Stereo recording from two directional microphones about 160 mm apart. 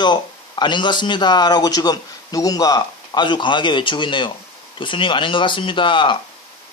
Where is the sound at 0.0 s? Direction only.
30° left (ahead or behind).